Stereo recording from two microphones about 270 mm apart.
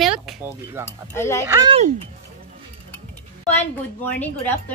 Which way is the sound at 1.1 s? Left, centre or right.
Centre.